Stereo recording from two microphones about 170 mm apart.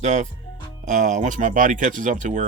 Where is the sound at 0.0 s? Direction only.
45° right (ahead or behind).